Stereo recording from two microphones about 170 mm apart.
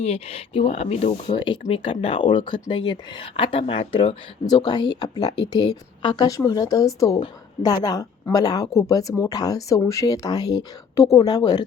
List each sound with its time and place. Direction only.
0.0 s speech: 35° left (ahead or behind)